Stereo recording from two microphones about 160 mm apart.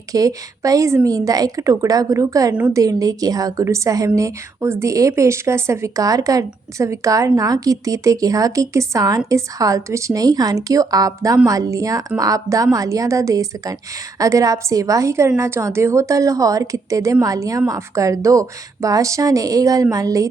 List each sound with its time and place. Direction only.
0.1 s a woman's voice: 20° right (ahead or behind)